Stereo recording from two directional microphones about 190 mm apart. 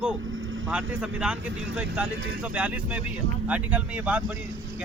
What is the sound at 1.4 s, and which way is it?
Speech, 75° right (ahead or behind).